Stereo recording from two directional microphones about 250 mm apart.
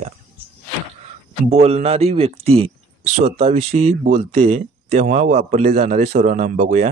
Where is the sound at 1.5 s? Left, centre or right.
Right.